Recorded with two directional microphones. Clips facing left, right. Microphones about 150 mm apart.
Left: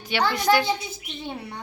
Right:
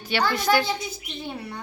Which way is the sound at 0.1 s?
20° left (ahead or behind).